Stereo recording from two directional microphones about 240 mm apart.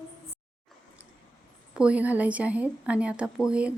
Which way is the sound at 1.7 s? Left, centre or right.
Centre.